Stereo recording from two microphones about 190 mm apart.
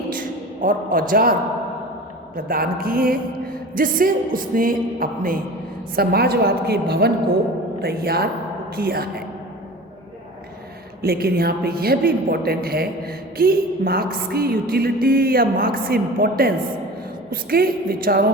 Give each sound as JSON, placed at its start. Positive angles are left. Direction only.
{"t": 0.1, "sound": "a sound", "side_deg": -45}
{"t": 2.3, "sound": "music", "side_deg": -50}
{"t": 6.0, "sound": "a woman's voice", "side_deg": -55}
{"t": 8.7, "sound": "music", "side_deg": -50}
{"t": 11.0, "sound": "music", "side_deg": -55}
{"t": 17.5, "sound": "music", "side_deg": -50}